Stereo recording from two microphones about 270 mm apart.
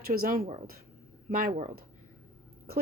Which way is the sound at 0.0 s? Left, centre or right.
Right.